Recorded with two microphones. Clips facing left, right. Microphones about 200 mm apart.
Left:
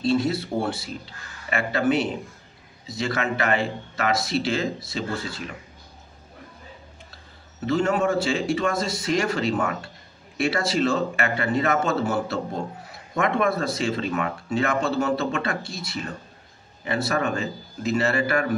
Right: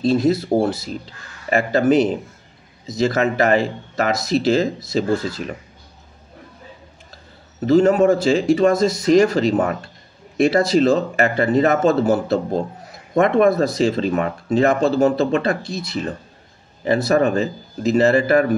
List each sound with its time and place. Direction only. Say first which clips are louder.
0.0 s speech: right 6 dB; 40° right (ahead or behind)
7.6 s speech: right 9 dB; 35° right (ahead or behind)